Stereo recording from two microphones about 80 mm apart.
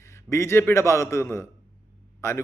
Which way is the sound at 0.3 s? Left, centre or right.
Left.